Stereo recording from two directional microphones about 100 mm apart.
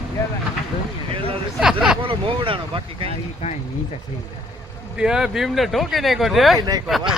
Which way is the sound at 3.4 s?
90° left.